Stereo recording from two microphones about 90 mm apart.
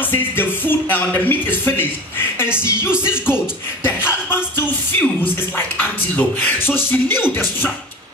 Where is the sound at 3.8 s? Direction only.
25° left (ahead or behind).